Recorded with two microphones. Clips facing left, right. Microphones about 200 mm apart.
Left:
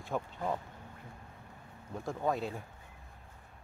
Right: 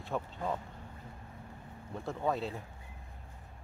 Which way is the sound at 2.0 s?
10° left (ahead or behind).